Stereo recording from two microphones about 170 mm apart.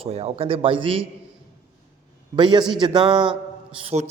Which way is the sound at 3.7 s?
35° right (ahead or behind).